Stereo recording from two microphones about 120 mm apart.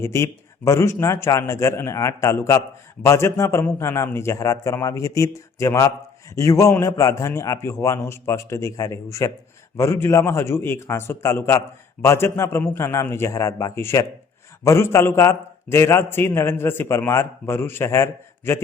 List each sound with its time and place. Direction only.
0.0 s a man's voice: 25° left (ahead or behind)